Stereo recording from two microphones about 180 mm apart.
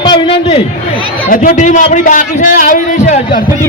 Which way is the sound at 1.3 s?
45° left (ahead or behind).